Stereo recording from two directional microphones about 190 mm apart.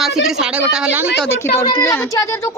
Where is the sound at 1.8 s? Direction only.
15° left (ahead or behind).